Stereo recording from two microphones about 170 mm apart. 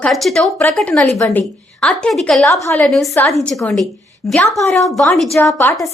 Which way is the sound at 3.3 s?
Centre (ahead or behind).